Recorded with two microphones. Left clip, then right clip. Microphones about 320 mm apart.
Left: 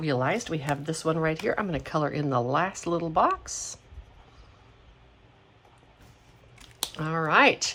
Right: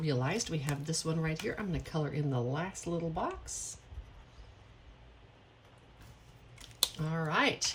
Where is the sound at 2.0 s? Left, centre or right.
Left.